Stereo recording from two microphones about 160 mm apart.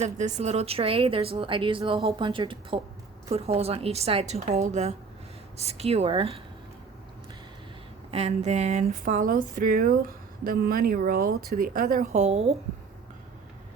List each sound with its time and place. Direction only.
0.0 s speech: 45° right (ahead or behind)
8.1 s speech: 40° right (ahead or behind); by 12.0 s 60° right (ahead or behind)
12.1 s speech: 45° right (ahead or behind)